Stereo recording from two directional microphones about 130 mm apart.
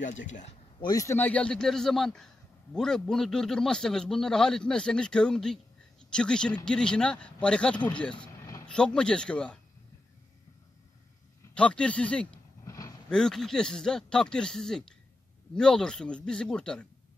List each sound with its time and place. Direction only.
0.0 s speech: 75° left (ahead or behind)
0.7 s a man's voice: 30° left (ahead or behind); by 9.6 s 5° left (ahead or behind)
11.5 s speech: 10° left (ahead or behind)
12.6 s a sound: 25° left (ahead or behind)
13.1 s a man's voice: 5° left (ahead or behind)